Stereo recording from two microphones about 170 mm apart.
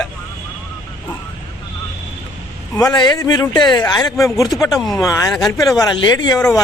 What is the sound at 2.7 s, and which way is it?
Speech, 25° left (ahead or behind).